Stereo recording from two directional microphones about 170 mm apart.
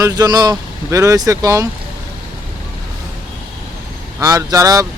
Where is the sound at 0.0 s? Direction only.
20° right (ahead or behind).